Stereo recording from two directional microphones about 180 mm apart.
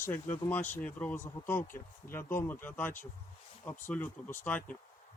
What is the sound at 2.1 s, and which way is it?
Speech, 10° left (ahead or behind).